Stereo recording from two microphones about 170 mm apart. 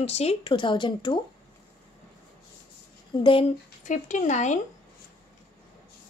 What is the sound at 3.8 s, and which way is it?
Speech, 45° left (ahead or behind).